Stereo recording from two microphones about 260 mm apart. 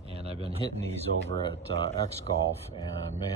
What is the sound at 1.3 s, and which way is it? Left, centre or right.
Speech, left.